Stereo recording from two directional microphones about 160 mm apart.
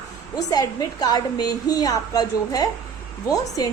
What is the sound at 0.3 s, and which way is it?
A woman's voice, 20° left (ahead or behind).